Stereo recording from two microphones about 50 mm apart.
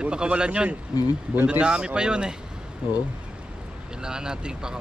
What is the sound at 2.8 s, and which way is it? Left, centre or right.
Speech, right.